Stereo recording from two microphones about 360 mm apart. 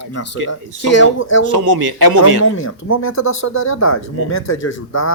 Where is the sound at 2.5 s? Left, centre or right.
Left.